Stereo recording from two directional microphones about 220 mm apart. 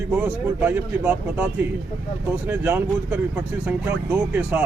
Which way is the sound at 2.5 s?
10° right (ahead or behind).